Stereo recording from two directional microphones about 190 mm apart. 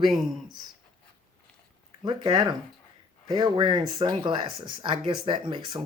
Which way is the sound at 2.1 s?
20° right (ahead or behind).